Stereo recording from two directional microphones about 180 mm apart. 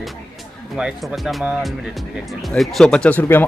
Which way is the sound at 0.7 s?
5° right (ahead or behind).